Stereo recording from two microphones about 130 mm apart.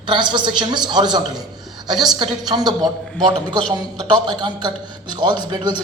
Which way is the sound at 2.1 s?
30° right (ahead or behind).